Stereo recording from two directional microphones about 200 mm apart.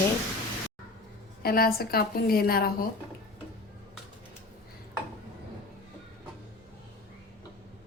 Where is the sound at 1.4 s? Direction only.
50° left (ahead or behind).